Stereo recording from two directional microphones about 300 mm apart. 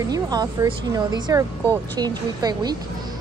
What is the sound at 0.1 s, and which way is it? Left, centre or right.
A woman's voice, centre.